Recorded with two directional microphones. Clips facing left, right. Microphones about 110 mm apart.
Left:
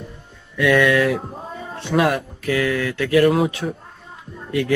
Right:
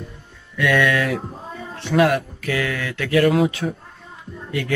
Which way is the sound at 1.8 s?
20° left (ahead or behind).